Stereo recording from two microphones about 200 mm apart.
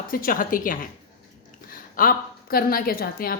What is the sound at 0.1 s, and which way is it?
A woman's voice, 45° left (ahead or behind).